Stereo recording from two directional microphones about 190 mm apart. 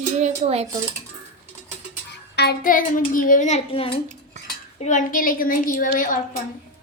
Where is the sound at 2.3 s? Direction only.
60° left (ahead or behind); by 3.9 s 30° left (ahead or behind).